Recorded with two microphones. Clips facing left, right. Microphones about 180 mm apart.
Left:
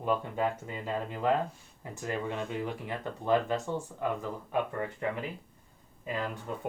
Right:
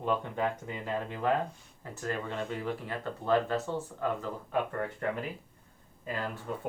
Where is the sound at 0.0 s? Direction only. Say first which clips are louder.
Left 1 dB; 5° left (ahead or behind).